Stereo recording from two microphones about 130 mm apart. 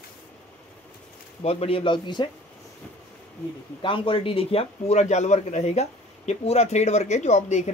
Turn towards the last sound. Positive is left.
turn(degrees=60)  # may be behind; listen again after turning